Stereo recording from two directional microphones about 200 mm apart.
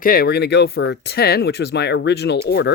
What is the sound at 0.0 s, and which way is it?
Speech, 50° left (ahead or behind).